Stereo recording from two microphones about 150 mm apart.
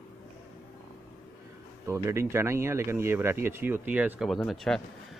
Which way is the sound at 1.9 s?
20° right (ahead or behind).